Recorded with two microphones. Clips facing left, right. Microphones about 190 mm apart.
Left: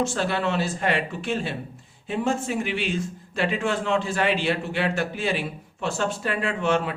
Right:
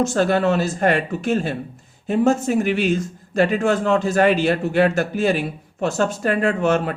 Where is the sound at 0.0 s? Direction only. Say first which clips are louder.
Right 7 dB; 45° right (ahead or behind).